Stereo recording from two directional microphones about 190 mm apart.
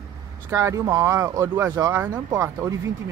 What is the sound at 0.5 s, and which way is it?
Speech, 15° right (ahead or behind).